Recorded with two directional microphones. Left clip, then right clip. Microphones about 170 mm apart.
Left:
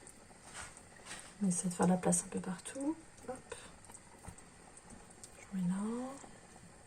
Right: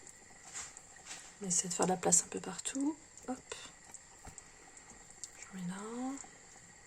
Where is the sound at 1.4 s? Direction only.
55° right (ahead or behind).